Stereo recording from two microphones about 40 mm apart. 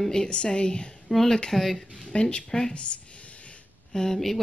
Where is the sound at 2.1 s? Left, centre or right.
Left.